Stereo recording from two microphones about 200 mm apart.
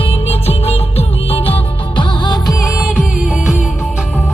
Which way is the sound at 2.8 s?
Centre (ahead or behind).